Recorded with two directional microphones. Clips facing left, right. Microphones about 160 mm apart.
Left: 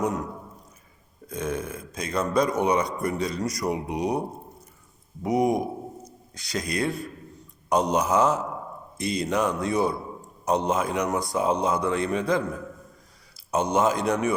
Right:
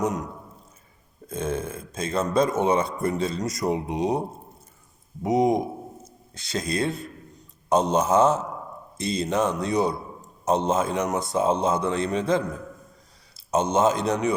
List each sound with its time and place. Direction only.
1.3 s a man's voice: 25° right (ahead or behind)
5.2 s a man's voice: 20° right (ahead or behind)